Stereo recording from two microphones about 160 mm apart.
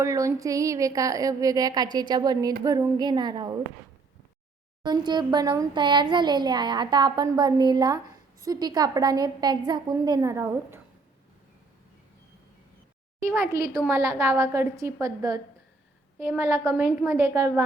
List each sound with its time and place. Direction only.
0.0 s a child's voice: 20° right (ahead or behind)
4.8 s a child's voice: 25° right (ahead or behind)
13.2 s a woman's voice: 15° right (ahead or behind)